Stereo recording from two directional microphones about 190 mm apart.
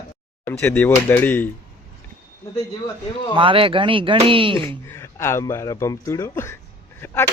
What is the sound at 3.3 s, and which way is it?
Speech, 25° right (ahead or behind).